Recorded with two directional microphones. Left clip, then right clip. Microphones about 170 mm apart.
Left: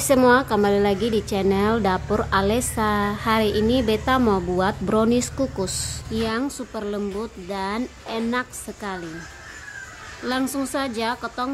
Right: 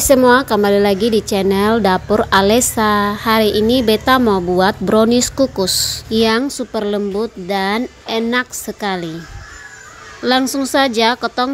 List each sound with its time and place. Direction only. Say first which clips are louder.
0.0 s a woman's voice: right 6 dB; 25° right (ahead or behind)
10.2 s speech: right 10 dB; 30° right (ahead or behind)